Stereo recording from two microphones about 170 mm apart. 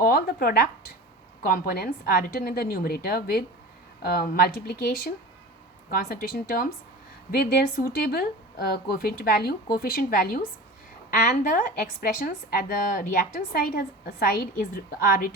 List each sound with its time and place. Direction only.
0.0 s a woman's voice: 60° left (ahead or behind)